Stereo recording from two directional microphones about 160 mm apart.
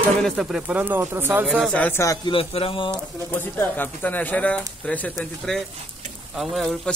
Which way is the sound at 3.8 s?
10° left (ahead or behind).